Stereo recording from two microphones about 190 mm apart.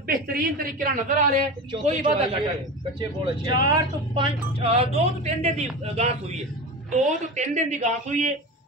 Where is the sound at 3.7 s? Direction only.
30° right (ahead or behind).